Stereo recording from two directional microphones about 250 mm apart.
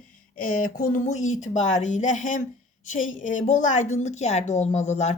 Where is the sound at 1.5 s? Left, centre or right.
Left.